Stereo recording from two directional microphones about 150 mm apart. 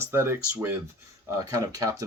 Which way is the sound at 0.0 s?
15° right (ahead or behind).